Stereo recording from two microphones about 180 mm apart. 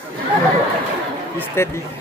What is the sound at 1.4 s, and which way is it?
Speech, 15° left (ahead or behind).